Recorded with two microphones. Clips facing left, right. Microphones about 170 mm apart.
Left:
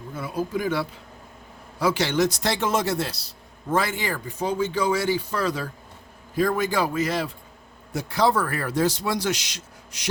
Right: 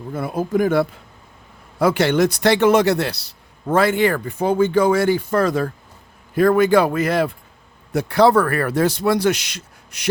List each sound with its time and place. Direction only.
0.1 s a man's voice: 55° right (ahead or behind)
6.3 s a man's voice: 60° right (ahead or behind)